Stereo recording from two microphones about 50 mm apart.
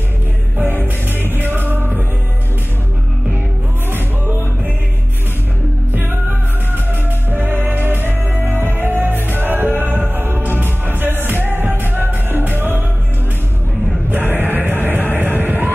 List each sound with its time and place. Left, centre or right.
0.6 s music: right
7.2 s music: right
14.1 s music: right